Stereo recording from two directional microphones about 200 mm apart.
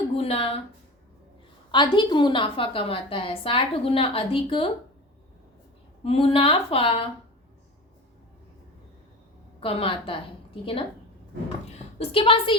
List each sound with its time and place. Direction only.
0.2 s a woman's voice: 30° left (ahead or behind)
1.7 s a woman's voice: 20° left (ahead or behind)
6.0 s a woman's voice: 30° left (ahead or behind)
9.6 s a woman's voice: 25° left (ahead or behind)
11.9 s a woman's voice: 25° left (ahead or behind)